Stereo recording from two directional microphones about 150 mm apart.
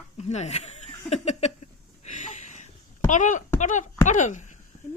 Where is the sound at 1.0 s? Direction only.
50° left (ahead or behind).